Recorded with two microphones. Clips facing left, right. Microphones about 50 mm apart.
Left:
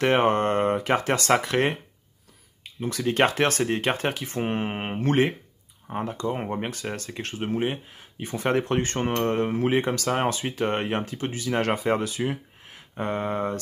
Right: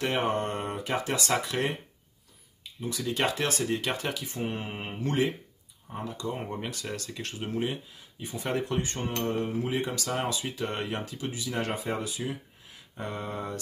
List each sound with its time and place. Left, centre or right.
0.0 s speech: left
8.0 s speech: left